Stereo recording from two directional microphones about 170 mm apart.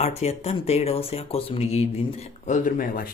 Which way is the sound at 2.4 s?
50° left (ahead or behind).